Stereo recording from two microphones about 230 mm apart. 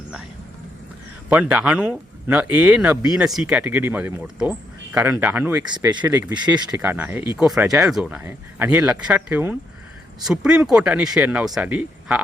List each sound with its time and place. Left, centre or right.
1.3 s speech: centre
5.7 s speech: centre
6.8 s speech: centre